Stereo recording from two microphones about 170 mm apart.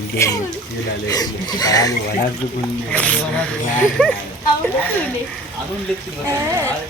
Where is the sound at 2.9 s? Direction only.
5° left (ahead or behind).